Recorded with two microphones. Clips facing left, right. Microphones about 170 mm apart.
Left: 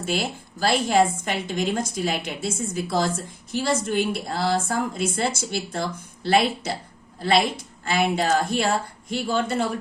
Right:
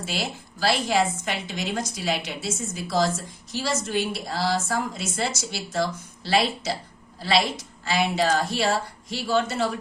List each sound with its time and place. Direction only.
0.0 s a woman's voice: 50° left (ahead or behind)